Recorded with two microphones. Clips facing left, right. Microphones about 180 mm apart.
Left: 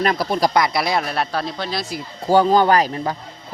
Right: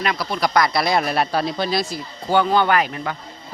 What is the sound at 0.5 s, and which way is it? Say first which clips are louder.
Speech: even; 20° left (ahead or behind).